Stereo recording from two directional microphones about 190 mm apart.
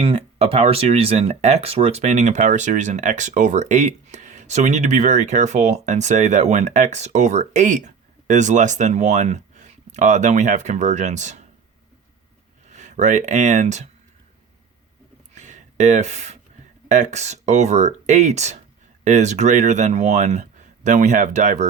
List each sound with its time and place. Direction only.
0.0 s speech: 30° right (ahead or behind)
12.6 s speech: 40° right (ahead or behind)
15.4 s a sound: 40° right (ahead or behind)
16.9 s speech: 40° right (ahead or behind)